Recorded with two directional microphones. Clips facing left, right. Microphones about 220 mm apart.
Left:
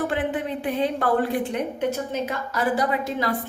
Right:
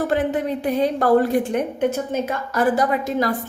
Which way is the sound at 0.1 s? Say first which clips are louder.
Right 5 dB; 40° right (ahead or behind).